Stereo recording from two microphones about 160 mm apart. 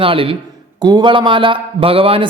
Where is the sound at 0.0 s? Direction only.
35° right (ahead or behind).